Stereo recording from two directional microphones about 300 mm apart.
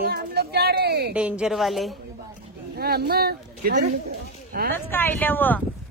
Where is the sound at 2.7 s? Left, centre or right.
Right.